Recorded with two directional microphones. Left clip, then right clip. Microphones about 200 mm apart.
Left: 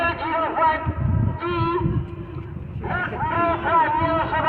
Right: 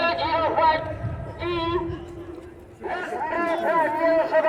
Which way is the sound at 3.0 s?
30° left (ahead or behind).